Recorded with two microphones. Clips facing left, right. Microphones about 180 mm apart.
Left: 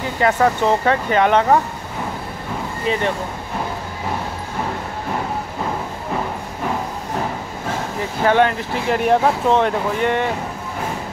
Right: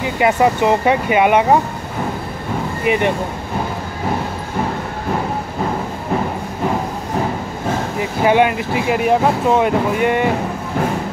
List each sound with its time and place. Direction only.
0.0 s speech: 10° right (ahead or behind)
2.8 s speech: 15° right (ahead or behind)
8.2 s speech: 10° right (ahead or behind)